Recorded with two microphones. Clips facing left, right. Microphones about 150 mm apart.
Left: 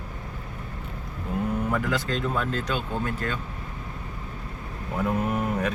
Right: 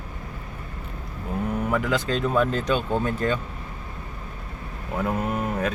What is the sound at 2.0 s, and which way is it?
Speech, 20° right (ahead or behind).